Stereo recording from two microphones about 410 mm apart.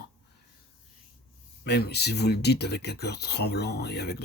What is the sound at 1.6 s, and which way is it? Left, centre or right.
Speech, left.